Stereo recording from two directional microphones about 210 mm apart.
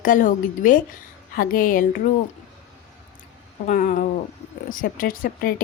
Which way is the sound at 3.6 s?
40° left (ahead or behind).